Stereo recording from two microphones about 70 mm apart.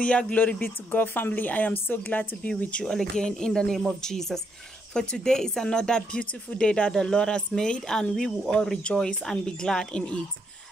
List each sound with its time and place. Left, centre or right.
0.0 s speech: centre
2.8 s speech: centre